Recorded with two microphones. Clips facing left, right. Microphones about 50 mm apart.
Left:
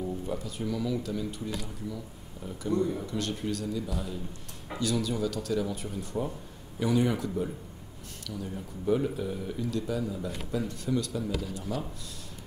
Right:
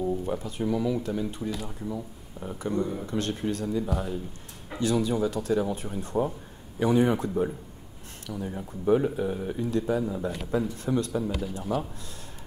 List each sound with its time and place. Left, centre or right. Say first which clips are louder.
0.0 s speech: right 5 dB; right